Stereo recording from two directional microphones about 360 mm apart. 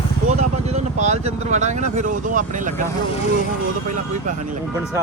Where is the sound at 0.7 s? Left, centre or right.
Centre.